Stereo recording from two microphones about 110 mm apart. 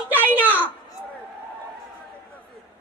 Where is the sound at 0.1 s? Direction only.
15° right (ahead or behind).